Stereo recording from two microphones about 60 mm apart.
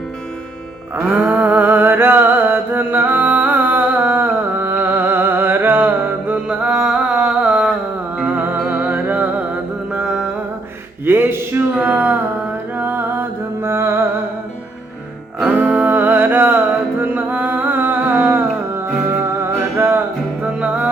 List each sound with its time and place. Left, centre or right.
1.0 s a sound: right
6.7 s a sound: centre
8.3 s music: right
10.0 s music: centre
11.0 s music: right
11.8 s a sound: right
12.7 s music: right
15.4 s music: right
20.4 s music: right